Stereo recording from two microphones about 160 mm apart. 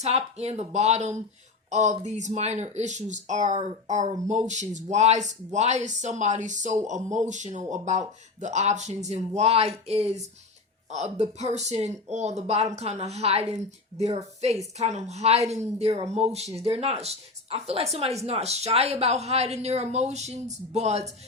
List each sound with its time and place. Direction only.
0.0 s a woman's voice: 40° right (ahead or behind)